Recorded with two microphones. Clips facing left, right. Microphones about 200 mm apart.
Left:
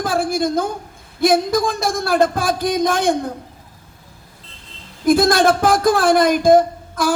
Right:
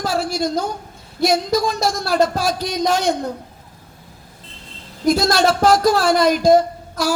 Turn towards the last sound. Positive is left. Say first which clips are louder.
# left 2 dB
turn(degrees=50)  # may be behind; listen again after turning